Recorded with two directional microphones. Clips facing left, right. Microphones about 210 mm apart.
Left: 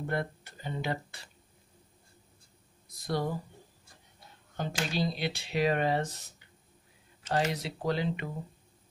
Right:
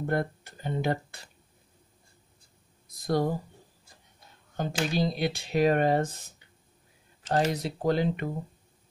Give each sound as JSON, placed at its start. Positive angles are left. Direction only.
{"t": 0.0, "sound": "speech", "side_deg": -45}
{"t": 3.1, "sound": "speech", "side_deg": -45}
{"t": 4.6, "sound": "speech", "side_deg": -50}
{"t": 7.2, "sound": "speech", "side_deg": -40}